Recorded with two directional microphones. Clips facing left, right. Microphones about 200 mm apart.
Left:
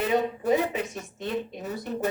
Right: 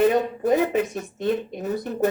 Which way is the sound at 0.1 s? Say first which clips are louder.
Right 3 dB; 50° right (ahead or behind).